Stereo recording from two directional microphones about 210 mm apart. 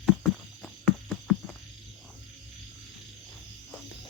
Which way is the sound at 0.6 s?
Centre (ahead or behind).